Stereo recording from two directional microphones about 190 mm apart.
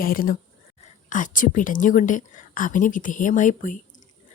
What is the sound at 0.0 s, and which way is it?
Speech, 50° left (ahead or behind).